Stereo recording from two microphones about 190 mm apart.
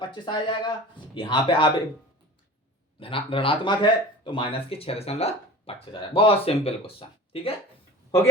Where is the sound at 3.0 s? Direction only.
30° left (ahead or behind).